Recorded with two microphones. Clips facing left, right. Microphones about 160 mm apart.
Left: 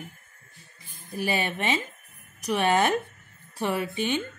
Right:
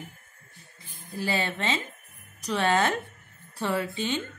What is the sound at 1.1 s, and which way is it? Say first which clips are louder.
A woman's voice: left 1 dB; 15° left (ahead or behind).